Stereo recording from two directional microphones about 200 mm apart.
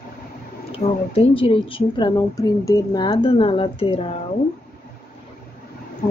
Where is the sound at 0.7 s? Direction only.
30° left (ahead or behind).